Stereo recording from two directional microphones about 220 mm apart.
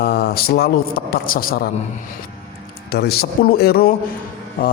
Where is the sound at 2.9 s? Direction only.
45° left (ahead or behind).